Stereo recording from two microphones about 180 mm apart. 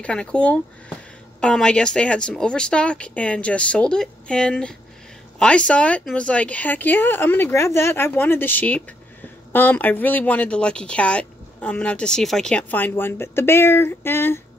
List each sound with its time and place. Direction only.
0.0 s speech: 5° left (ahead or behind)